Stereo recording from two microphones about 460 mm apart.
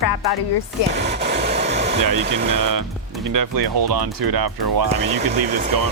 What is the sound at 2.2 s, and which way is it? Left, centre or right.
Speech, right.